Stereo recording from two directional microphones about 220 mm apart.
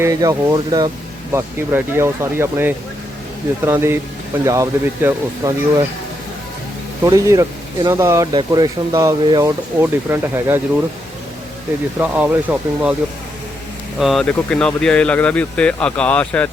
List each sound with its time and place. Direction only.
0.0 s speech: 15° right (ahead or behind)
7.0 s speech: 15° right (ahead or behind)
11.9 s speech: 5° right (ahead or behind)
14.0 s speech: centre (ahead or behind)